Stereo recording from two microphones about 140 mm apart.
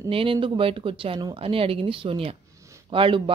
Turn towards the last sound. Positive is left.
turn(degrees=-40)  # may be behind; listen again after turning